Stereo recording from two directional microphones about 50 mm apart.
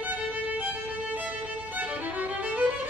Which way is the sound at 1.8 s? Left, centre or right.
Right.